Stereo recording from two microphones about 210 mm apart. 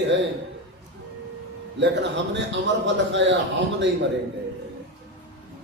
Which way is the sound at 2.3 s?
60° right (ahead or behind).